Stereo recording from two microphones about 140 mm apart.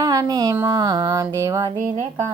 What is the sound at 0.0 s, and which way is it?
Speech, 25° right (ahead or behind).